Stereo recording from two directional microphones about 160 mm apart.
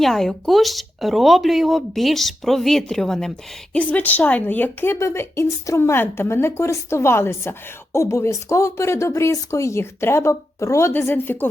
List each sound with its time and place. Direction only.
0.0 s speech: centre (ahead or behind)